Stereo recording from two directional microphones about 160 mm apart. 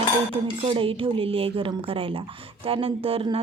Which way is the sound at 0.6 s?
35° right (ahead or behind).